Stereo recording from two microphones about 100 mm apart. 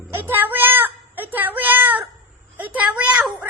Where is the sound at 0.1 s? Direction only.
20° right (ahead or behind).